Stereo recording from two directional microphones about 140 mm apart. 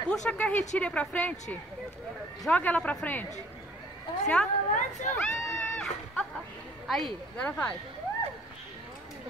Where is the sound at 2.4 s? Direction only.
10° left (ahead or behind).